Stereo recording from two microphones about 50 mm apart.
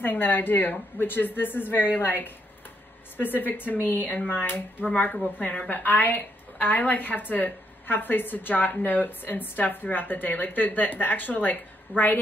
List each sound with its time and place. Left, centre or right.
0.0 s a woman's voice: left
4.8 s a woman's voice: left